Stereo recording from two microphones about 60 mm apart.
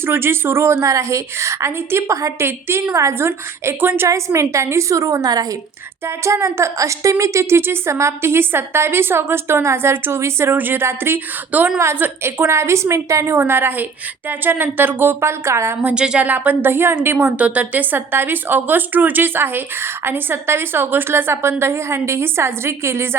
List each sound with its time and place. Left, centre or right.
0.0 s a woman's voice: right
2.9 s a woman's voice: right
4.1 s a woman's voice: right
6.1 s a woman's voice: right
11.5 s a woman's voice: right
13.3 s speech: right
15.2 s a woman's voice: right
16.0 s a woman's voice: centre
16.2 s speech: right
17.3 s speech: right